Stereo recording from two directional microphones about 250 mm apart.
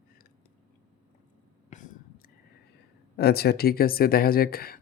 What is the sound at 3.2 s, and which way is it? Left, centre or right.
Speech, left.